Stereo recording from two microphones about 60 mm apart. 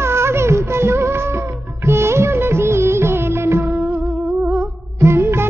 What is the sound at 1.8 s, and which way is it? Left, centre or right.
Music of bollywood, right.